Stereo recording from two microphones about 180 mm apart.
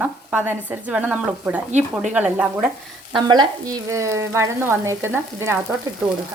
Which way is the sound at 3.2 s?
25° right (ahead or behind).